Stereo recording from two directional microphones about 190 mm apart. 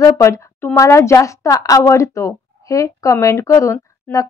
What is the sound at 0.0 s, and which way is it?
A woman's voice, 15° left (ahead or behind).